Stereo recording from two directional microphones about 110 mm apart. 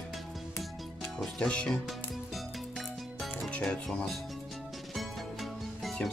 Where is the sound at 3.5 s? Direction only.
5° left (ahead or behind).